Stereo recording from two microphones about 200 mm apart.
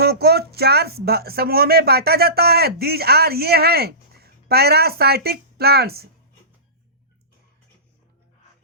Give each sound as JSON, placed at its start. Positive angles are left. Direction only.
{"t": 0.0, "sound": "speech", "side_deg": -55}